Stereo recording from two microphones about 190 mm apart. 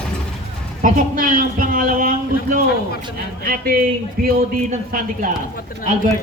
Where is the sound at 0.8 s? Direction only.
45° right (ahead or behind).